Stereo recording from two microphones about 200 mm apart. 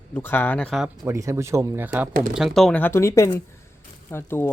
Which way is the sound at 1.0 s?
15° right (ahead or behind).